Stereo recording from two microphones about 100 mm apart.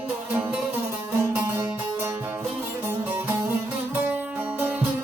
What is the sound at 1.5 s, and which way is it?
Music, 20° right (ahead or behind).